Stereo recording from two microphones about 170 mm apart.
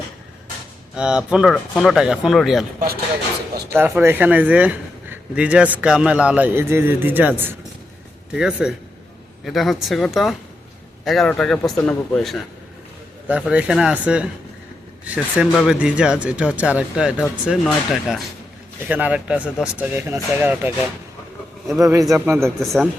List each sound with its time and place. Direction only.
0.9 s speech: 5° right (ahead or behind)
3.7 s a man's voice: 10° right (ahead or behind)
13.2 s a man's voice: 10° right (ahead or behind)
21.9 s a man's voice: 20° right (ahead or behind)
22.6 s speech: centre (ahead or behind)